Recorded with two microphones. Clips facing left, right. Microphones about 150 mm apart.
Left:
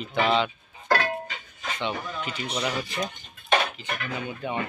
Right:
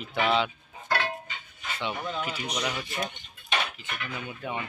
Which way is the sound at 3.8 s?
40° left (ahead or behind).